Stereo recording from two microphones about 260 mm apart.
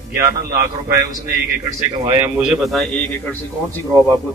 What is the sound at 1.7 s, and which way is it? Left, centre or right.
A man's voice, centre.